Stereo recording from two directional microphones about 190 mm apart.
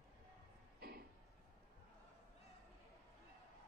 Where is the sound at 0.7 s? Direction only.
55° right (ahead or behind).